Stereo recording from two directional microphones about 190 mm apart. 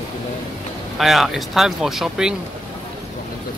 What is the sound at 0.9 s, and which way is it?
Speech, centre (ahead or behind).